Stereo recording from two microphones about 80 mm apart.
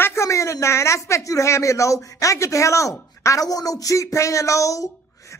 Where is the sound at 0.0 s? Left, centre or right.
Left.